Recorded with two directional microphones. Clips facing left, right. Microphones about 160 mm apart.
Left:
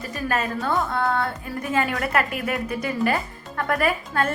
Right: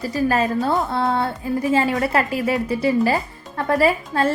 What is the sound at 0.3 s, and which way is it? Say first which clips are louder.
A woman's voice: right 4 dB; 30° right (ahead or behind).